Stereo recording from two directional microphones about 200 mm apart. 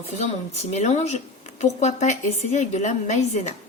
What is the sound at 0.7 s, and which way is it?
A woman's voice, 35° left (ahead or behind).